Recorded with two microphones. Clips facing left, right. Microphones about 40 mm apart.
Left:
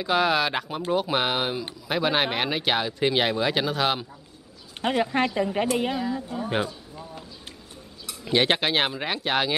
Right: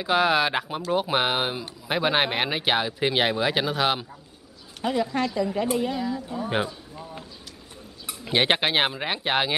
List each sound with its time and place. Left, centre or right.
0.0 s speech: centre
4.8 s a woman's voice: left
5.9 s a woman's voice: centre
6.4 s a sound: centre
8.1 s speech: centre